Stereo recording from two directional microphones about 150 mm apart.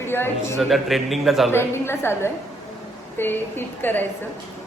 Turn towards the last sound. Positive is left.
turn(degrees=15)  # may be behind; listen again after turning